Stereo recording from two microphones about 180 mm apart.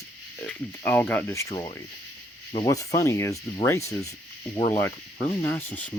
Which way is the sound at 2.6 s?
20° left (ahead or behind).